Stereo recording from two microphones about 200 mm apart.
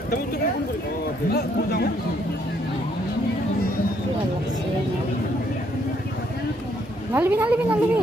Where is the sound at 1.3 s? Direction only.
50° left (ahead or behind).